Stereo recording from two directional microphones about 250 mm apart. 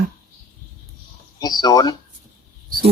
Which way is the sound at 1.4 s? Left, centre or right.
Centre.